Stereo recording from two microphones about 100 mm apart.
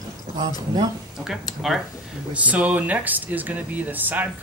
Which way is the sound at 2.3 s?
15° right (ahead or behind).